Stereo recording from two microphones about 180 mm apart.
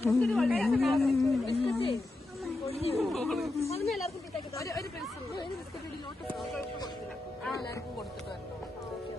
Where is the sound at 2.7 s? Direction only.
35° left (ahead or behind).